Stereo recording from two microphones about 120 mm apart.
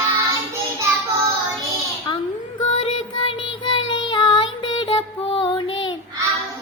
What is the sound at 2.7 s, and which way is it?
Child singing, 55° left (ahead or behind).